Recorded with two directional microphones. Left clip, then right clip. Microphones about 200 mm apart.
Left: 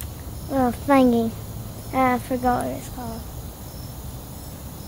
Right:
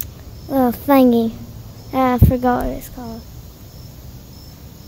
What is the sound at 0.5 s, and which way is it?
Speech, 30° right (ahead or behind).